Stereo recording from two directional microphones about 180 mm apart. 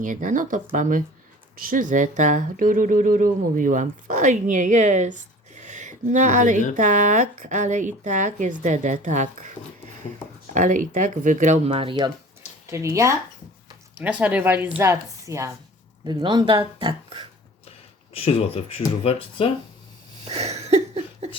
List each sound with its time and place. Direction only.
0.0 s speech: 45° right (ahead or behind)
10.5 s speech: 45° right (ahead or behind); by 17.2 s 25° right (ahead or behind)
18.1 s speech: 35° left (ahead or behind)
20.2 s a sound: 35° right (ahead or behind)